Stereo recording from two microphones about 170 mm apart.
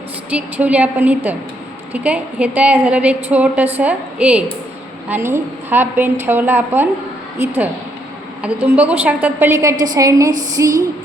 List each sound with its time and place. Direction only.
0.3 s a woman's voice: 10° right (ahead or behind)
10.5 s music: 20° right (ahead or behind)